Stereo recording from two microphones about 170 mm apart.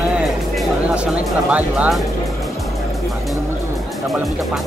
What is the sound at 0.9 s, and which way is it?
Speech, 5° right (ahead or behind).